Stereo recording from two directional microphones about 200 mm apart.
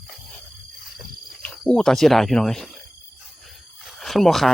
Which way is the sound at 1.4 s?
5° left (ahead or behind).